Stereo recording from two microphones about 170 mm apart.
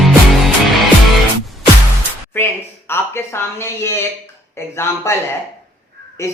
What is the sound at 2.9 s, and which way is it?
Speech, 15° left (ahead or behind).